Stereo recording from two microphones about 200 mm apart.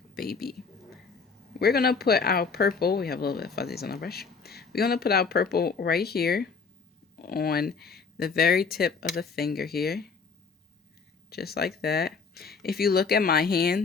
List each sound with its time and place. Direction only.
1.5 s speech: 50° left (ahead or behind)
11.3 s speech: 50° left (ahead or behind)